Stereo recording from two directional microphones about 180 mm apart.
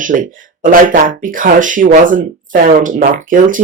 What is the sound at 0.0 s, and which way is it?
Speech, 45° right (ahead or behind).